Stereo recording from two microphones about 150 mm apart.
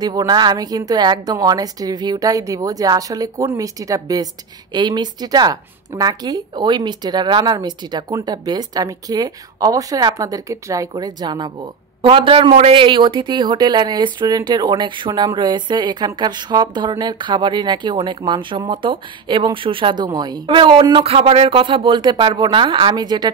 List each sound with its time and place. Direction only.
0.0 s a woman's voice: 25° right (ahead or behind)